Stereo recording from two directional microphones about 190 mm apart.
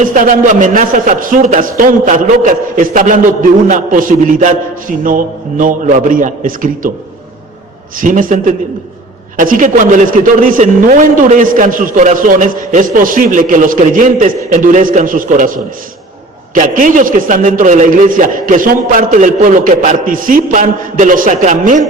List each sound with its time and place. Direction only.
0.0 s a man's voice: 45° right (ahead or behind)
7.9 s a man's voice: 45° right (ahead or behind)